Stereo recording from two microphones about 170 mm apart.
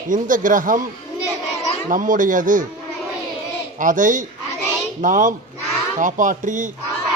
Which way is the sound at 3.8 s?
50° right (ahead or behind).